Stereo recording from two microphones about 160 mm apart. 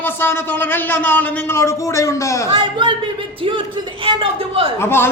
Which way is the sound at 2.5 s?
30° right (ahead or behind).